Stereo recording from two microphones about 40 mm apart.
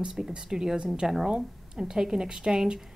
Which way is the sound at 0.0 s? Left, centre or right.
Centre.